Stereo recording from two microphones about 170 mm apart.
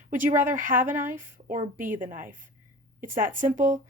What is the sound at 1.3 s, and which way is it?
A woman's voice, 50° right (ahead or behind).